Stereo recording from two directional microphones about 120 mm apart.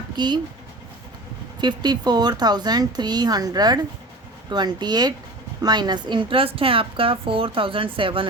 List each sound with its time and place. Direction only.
0.2 s speech: 40° right (ahead or behind)
1.6 s a woman's voice: 35° right (ahead or behind)